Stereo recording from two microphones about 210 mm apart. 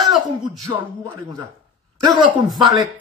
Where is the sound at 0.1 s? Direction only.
Centre (ahead or behind).